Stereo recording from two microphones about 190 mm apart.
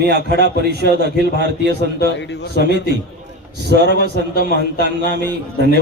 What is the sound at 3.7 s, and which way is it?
A man's voice, 60° right (ahead or behind).